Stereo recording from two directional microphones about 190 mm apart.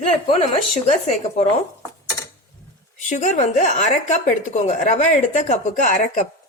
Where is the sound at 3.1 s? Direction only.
40° left (ahead or behind).